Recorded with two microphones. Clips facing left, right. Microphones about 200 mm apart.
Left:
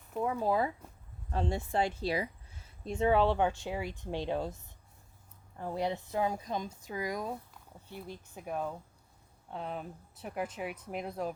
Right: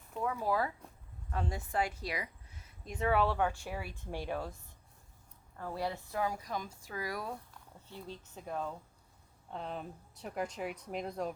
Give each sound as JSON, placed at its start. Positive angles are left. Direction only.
{"t": 0.2, "sound": "a woman's voice", "side_deg": 25}
{"t": 5.5, "sound": "a woman's voice", "side_deg": 20}